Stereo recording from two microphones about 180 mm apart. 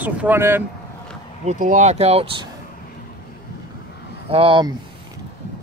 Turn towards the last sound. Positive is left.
turn(degrees=-30)  # may be behind; listen again after turning